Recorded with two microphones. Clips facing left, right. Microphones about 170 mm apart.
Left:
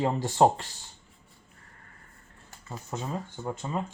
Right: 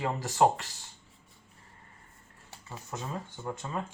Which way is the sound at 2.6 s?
20° left (ahead or behind).